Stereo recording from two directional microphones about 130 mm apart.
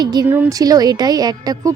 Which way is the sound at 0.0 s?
35° right (ahead or behind).